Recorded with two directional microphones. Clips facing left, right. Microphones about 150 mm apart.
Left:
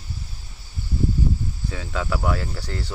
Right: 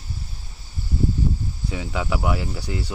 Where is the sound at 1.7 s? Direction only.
15° right (ahead or behind).